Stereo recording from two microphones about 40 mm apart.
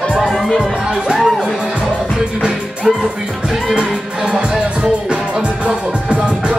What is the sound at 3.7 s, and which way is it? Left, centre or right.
Music, right.